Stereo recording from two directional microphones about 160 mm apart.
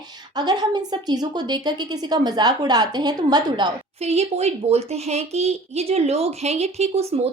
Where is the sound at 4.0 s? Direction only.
40° right (ahead or behind).